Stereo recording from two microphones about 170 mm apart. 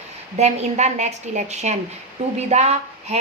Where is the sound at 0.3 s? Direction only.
40° right (ahead or behind).